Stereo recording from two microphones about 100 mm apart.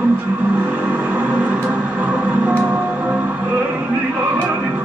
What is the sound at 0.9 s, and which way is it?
Music, 15° right (ahead or behind).